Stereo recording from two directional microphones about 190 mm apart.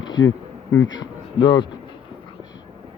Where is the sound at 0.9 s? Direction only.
25° left (ahead or behind).